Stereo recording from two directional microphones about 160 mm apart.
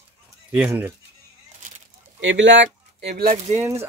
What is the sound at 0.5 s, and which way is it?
Speech, 10° right (ahead or behind).